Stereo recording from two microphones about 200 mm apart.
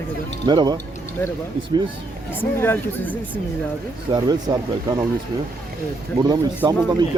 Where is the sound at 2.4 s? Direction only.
10° left (ahead or behind).